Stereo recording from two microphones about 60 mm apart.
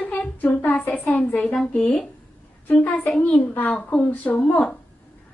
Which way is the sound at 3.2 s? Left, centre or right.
Left.